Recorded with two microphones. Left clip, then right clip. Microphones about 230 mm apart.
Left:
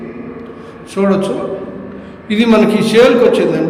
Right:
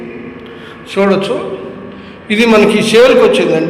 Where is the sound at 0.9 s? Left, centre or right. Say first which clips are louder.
Right 3 dB; centre.